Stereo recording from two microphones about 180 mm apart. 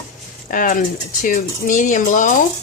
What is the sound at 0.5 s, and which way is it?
Speech, 50° left (ahead or behind).